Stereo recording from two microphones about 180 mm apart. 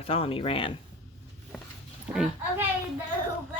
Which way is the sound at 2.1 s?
5° right (ahead or behind).